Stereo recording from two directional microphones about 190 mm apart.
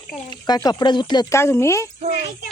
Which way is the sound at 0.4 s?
20° left (ahead or behind).